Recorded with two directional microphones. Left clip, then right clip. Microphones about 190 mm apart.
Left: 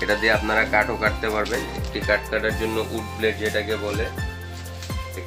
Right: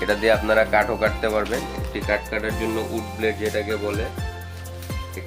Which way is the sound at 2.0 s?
30° right (ahead or behind).